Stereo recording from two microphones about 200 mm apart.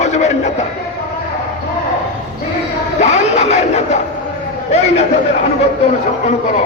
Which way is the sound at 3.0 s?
35° left (ahead or behind).